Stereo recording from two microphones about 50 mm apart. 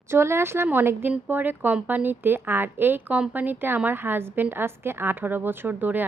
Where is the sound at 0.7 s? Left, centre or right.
Right.